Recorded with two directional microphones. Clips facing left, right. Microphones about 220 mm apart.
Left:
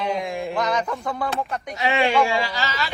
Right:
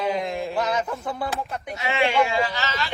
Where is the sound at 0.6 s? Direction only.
5° right (ahead or behind).